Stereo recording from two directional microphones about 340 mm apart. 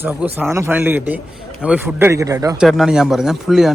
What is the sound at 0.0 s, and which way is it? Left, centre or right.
A man's voice, centre.